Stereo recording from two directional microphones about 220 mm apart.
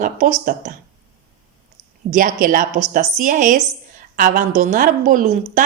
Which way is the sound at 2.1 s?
40° right (ahead or behind).